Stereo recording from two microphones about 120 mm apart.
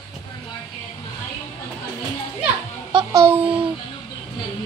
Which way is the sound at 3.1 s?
25° right (ahead or behind).